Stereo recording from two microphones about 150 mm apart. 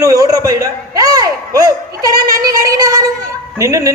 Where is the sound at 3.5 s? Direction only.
20° right (ahead or behind).